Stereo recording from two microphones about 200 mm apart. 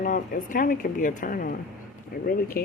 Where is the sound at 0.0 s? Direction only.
40° left (ahead or behind).